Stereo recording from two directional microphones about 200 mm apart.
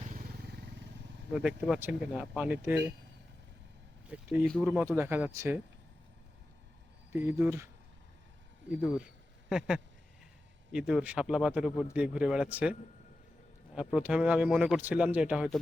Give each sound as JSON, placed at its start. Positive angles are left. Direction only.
{"t": 0.0, "sound": "wild animals", "side_deg": -40}
{"t": 1.3, "sound": "speech", "side_deg": -5}
{"t": 4.0, "sound": "speech", "side_deg": -10}
{"t": 7.1, "sound": "speech", "side_deg": -10}
{"t": 8.7, "sound": "speech", "side_deg": -5}
{"t": 13.7, "sound": "speech", "side_deg": -5}